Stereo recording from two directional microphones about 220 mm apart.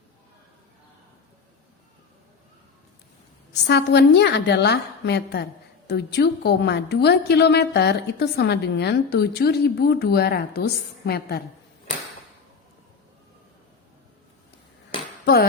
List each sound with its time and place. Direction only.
3.7 s a woman's voice: 50° left (ahead or behind)
15.2 s speech: 45° left (ahead or behind)